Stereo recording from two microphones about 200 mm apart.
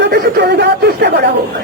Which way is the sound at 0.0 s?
55° right (ahead or behind).